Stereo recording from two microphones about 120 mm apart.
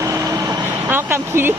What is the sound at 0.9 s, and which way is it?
Speech, 20° right (ahead or behind).